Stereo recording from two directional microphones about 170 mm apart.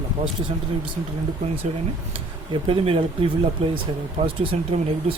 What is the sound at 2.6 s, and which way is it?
Speech, 30° right (ahead or behind).